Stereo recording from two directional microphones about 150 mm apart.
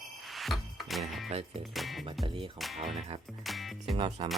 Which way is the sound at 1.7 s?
Centre (ahead or behind).